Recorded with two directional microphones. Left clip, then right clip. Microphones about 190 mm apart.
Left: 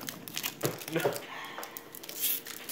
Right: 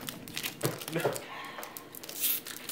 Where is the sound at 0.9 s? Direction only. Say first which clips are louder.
Left 1 dB; 40° left (ahead or behind).